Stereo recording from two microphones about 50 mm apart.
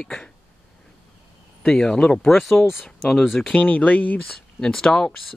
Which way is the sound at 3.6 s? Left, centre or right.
Left.